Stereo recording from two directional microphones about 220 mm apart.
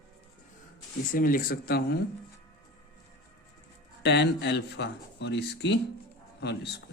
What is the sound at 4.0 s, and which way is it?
Speech, 50° left (ahead or behind).